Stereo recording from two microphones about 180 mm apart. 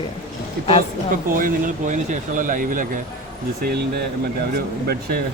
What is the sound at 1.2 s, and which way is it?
Speech, 50° right (ahead or behind).